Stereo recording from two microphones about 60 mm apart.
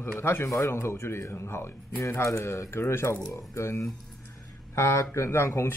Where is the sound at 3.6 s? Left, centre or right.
Left.